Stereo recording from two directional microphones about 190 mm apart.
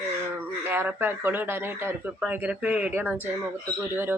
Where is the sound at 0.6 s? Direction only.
10° right (ahead or behind).